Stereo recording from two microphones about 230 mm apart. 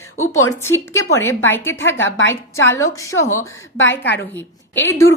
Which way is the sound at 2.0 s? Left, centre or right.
Left.